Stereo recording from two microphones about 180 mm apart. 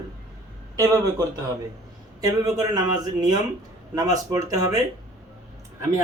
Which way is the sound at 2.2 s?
20° right (ahead or behind).